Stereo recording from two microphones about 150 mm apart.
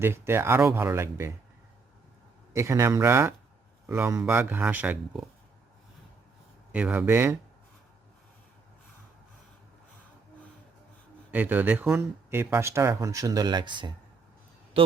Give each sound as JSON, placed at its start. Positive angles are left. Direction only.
{"t": 0.0, "sound": "speech", "side_deg": -15}
{"t": 2.5, "sound": "speech", "side_deg": -20}
{"t": 6.7, "sound": "speech", "side_deg": -10}
{"t": 11.3, "sound": "speech", "side_deg": -10}